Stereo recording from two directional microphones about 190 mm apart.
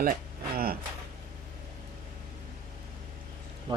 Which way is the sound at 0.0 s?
50° right (ahead or behind).